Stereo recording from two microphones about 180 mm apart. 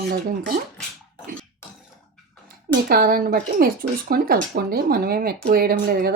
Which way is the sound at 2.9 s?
55° right (ahead or behind).